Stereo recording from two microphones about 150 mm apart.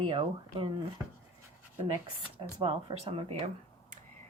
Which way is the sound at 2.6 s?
40° right (ahead or behind).